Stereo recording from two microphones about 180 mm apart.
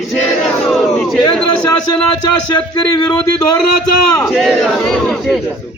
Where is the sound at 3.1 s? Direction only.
5° left (ahead or behind).